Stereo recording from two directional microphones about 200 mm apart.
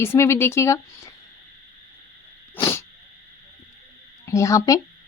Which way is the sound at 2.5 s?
10° left (ahead or behind).